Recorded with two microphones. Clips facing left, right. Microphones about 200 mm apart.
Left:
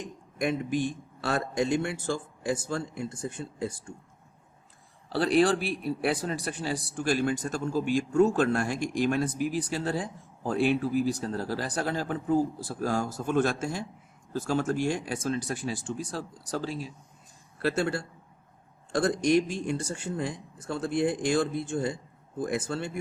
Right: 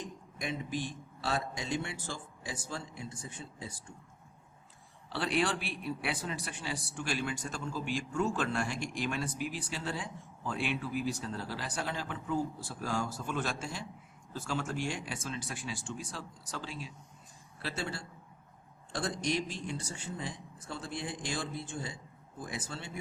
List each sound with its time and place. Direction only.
0.3 s a man's voice: 50° left (ahead or behind)
5.0 s a man's voice: 40° left (ahead or behind)